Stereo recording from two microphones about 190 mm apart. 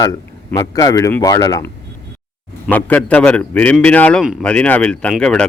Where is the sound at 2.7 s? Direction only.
10° left (ahead or behind).